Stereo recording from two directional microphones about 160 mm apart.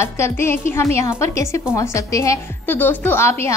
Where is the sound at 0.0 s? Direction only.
15° left (ahead or behind).